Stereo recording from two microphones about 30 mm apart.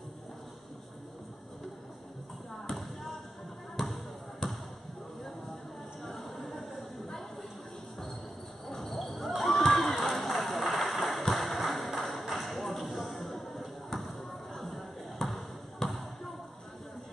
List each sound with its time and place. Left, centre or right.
2.7 s basketball bounce: centre
3.8 s basketball bounce: centre
6.0 s a sound: centre
8.6 s basketball bounce: centre
9.7 s run: centre
13.9 s basketball bounce: centre